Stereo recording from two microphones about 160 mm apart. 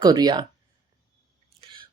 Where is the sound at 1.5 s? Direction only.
35° right (ahead or behind).